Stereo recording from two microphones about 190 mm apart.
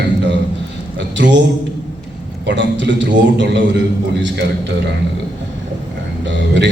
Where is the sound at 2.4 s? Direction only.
70° right (ahead or behind).